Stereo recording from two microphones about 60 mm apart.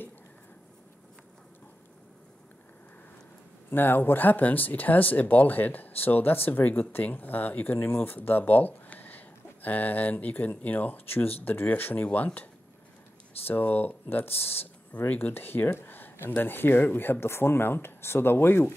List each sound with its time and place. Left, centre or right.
3.7 s speech: left
13.5 s speech: left